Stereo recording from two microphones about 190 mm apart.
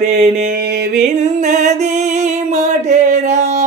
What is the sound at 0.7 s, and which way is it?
Music, 65° right (ahead or behind).